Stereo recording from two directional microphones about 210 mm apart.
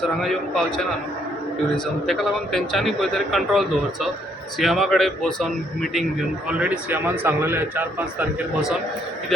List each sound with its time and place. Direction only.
0.0 s speech: centre (ahead or behind)
1.7 s a man's voice: centre (ahead or behind)